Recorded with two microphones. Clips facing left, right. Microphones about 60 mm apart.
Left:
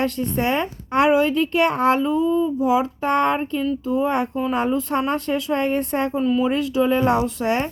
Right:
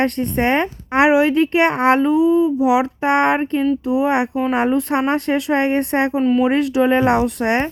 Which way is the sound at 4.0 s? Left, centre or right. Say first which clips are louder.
Right 2 dB; right.